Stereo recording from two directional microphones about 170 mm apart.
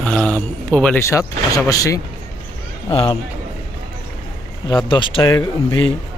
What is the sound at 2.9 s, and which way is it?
Speech, 35° left (ahead or behind).